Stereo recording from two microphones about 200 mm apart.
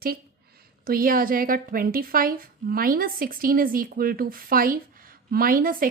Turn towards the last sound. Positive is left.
turn(degrees=-45)  # may be behind; listen again after turning